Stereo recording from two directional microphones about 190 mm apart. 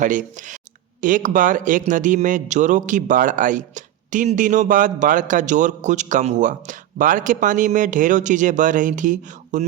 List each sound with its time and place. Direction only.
0.0 s speech: 40° right (ahead or behind)